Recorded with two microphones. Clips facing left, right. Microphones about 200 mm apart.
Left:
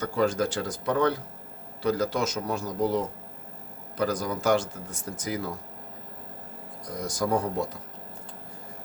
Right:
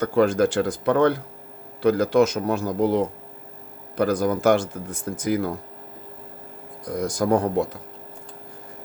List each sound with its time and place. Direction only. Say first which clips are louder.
0.0 s speech: right 7 dB; 60° right (ahead or behind)
6.8 s speech: right 6 dB; 55° right (ahead or behind)